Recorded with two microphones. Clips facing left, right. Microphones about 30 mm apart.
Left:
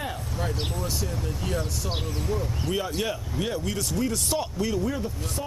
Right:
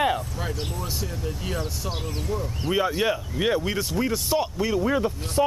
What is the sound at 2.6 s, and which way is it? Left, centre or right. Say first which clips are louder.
Speech: right 8 dB; right.